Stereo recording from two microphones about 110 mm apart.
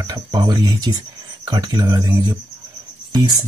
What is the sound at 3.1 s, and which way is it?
Speech, 35° right (ahead or behind).